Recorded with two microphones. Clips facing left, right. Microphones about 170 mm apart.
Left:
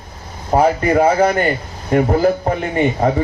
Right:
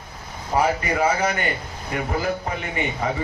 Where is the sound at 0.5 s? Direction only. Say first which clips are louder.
Left 8 dB; 50° left (ahead or behind).